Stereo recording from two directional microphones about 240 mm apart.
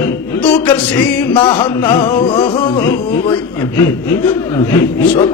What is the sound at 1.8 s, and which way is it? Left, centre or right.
Speech, centre.